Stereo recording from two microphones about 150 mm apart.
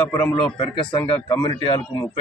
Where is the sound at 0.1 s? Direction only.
15° left (ahead or behind).